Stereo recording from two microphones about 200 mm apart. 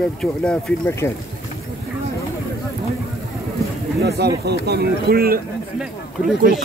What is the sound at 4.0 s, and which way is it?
Speech, 55° right (ahead or behind).